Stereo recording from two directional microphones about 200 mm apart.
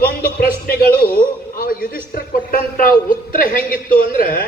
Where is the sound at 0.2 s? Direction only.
50° left (ahead or behind).